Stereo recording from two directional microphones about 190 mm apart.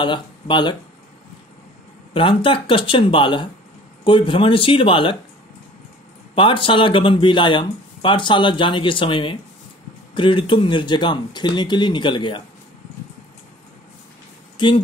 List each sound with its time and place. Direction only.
0.0 s speech: 25° left (ahead or behind)
2.1 s speech: 25° left (ahead or behind)
6.3 s speech: 25° left (ahead or behind)
14.6 s speech: 25° left (ahead or behind)